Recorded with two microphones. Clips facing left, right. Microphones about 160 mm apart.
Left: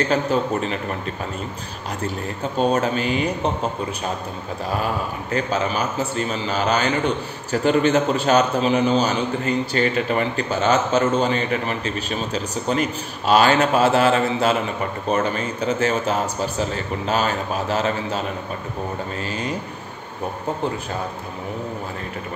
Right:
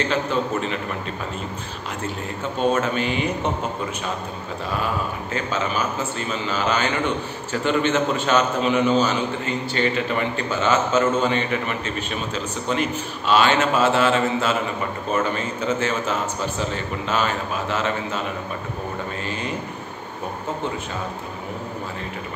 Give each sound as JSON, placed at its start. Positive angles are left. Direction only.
{"t": 0.1, "sound": "a man's voice", "side_deg": 40}
{"t": 2.7, "sound": "a man's voice", "side_deg": 35}
{"t": 5.3, "sound": "a man's voice", "side_deg": 40}